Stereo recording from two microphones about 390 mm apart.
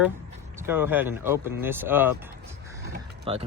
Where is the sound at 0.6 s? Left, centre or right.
Centre.